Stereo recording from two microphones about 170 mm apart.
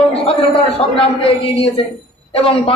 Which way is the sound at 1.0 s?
35° left (ahead or behind).